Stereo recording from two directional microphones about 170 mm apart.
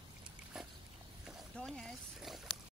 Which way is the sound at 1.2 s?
5° left (ahead or behind).